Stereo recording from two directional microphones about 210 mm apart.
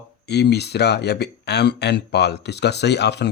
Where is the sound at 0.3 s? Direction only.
50° left (ahead or behind).